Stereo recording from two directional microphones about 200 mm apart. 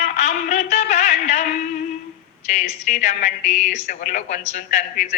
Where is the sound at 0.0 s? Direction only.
40° left (ahead or behind).